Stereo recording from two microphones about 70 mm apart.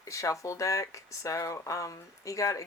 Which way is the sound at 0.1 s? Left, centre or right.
Left.